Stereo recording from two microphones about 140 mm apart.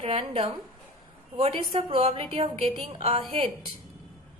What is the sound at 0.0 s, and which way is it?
A woman's voice, 45° right (ahead or behind).